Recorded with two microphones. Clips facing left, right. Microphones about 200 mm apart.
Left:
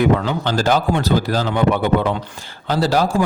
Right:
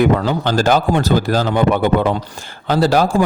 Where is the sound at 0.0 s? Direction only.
45° right (ahead or behind).